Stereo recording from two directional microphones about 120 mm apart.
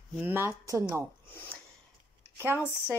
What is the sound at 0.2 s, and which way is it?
Speech, 20° right (ahead or behind).